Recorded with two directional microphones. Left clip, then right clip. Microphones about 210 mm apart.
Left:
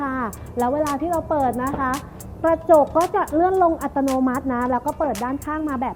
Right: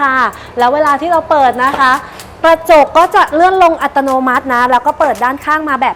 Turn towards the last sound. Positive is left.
turn(degrees=-15)  # may be behind; listen again after turning